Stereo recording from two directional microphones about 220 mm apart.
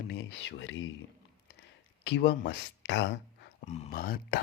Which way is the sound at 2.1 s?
45° left (ahead or behind).